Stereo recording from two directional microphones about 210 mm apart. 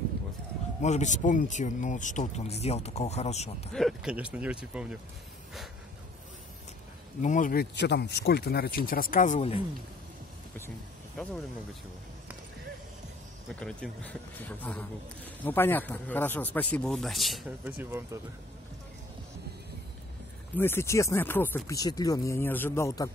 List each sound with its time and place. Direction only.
0.8 s speech: 35° left (ahead or behind)
3.7 s speech: centre (ahead or behind)
7.2 s speech: 35° left (ahead or behind)
7.7 s speech: 55° left (ahead or behind); by 9.6 s 30° left (ahead or behind)
13.6 s speech: 5° left (ahead or behind)
20.5 s speech: 10° left (ahead or behind)